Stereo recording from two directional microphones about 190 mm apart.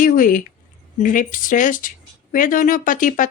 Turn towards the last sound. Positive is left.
turn(degrees=45)  # may be behind; listen again after turning